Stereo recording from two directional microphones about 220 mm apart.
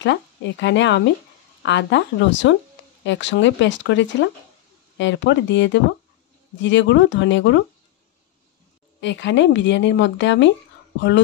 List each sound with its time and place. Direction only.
0.0 s speech: 55° left (ahead or behind)
9.0 s speech: 55° left (ahead or behind)